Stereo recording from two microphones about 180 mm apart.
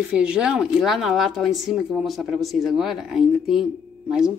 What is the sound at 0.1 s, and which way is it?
Speech, 5° right (ahead or behind).